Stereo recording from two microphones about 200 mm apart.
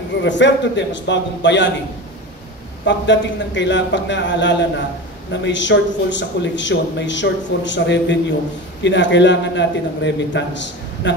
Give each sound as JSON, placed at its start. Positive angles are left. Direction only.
{"t": 0.2, "sound": "a man's voice", "side_deg": 65}
{"t": 2.8, "sound": "a man's voice", "side_deg": 60}